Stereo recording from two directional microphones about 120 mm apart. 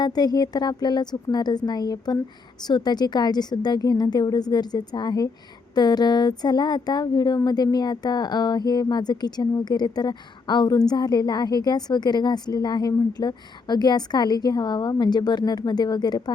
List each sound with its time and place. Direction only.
0.0 s speech: 35° left (ahead or behind)